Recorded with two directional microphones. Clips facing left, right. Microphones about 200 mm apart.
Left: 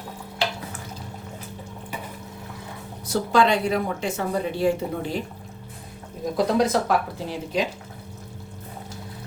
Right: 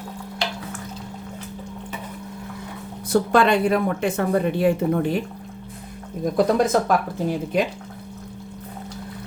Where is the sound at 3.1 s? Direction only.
55° right (ahead or behind).